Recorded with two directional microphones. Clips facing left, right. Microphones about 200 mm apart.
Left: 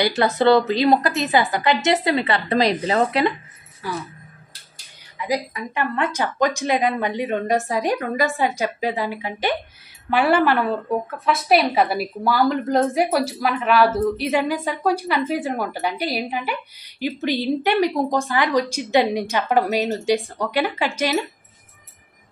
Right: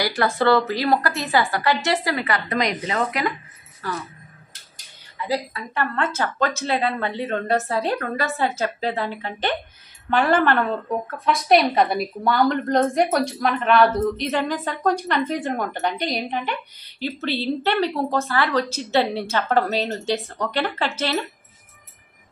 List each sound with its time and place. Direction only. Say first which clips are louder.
0.0 s a woman's voice: left 3 dB; 20° left (ahead or behind)
3.8 s a woman's voice: left 1 dB; 10° left (ahead or behind)
5.1 s a woman's voice: left 1 dB; 15° left (ahead or behind)